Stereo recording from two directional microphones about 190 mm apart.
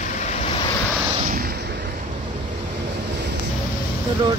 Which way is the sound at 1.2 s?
50° right (ahead or behind).